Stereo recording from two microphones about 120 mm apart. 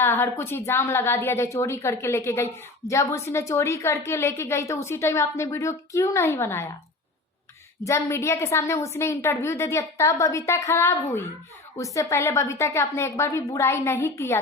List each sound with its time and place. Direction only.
0.0 s a woman's voice: 20° left (ahead or behind)
7.9 s a woman's voice: 25° left (ahead or behind)